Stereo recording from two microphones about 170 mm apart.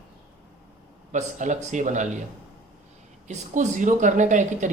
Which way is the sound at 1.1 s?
45° right (ahead or behind).